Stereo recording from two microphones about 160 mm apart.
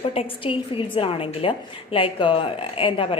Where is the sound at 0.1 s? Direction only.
35° left (ahead or behind).